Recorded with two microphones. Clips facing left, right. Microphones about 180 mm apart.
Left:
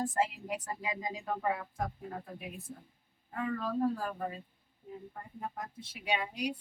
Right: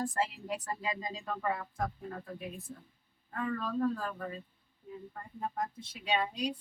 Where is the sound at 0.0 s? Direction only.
20° left (ahead or behind).